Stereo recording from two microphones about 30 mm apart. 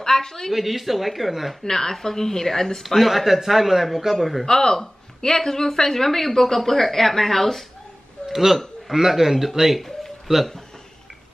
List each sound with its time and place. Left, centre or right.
0.0 s a sound: centre
0.5 s speech: centre
1.6 s speech: centre
2.8 s speech: centre
4.5 s speech: centre
8.3 s a man's voice: centre
10.3 s speech: centre